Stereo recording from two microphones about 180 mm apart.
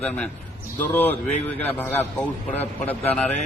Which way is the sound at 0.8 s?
10° left (ahead or behind).